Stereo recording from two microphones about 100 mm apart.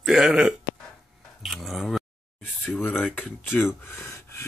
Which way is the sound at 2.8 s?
20° left (ahead or behind).